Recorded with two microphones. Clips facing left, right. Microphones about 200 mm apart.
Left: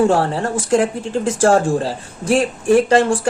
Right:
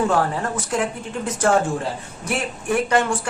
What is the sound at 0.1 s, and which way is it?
Speech, 30° left (ahead or behind).